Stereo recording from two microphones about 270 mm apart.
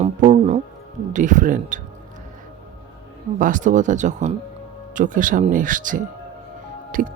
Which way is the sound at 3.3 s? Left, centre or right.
Right.